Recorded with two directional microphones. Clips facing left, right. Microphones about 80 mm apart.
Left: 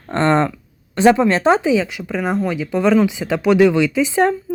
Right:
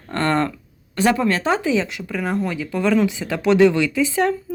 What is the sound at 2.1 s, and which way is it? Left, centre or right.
Speech, left.